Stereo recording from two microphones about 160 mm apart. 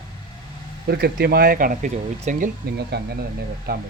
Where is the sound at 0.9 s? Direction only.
75° right (ahead or behind); by 2.5 s 55° right (ahead or behind).